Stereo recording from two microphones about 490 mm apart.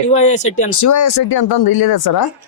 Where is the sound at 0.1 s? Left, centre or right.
Centre.